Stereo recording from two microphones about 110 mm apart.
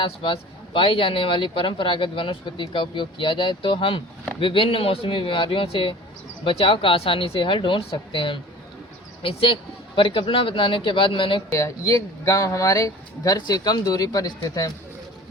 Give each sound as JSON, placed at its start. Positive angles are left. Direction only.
{"t": 0.0, "sound": "speech", "side_deg": 50}
{"t": 11.5, "sound": "speech", "side_deg": 30}